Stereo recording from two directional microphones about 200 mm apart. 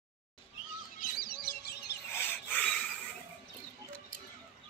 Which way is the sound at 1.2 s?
50° left (ahead or behind).